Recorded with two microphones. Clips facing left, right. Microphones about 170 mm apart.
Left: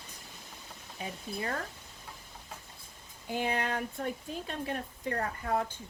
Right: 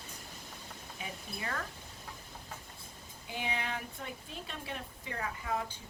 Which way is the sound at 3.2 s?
45° left (ahead or behind).